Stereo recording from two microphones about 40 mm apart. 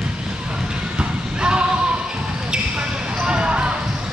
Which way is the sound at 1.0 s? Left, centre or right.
Right.